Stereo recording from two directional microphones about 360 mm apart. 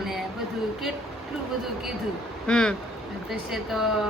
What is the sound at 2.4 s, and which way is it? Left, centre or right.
Speech, centre.